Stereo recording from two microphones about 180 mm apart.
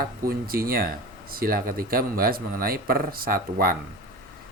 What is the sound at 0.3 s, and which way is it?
Speech, 55° right (ahead or behind).